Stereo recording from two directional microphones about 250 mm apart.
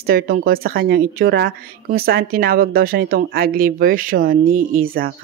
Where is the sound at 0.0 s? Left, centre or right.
Right.